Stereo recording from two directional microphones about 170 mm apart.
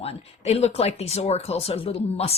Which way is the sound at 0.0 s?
35° left (ahead or behind).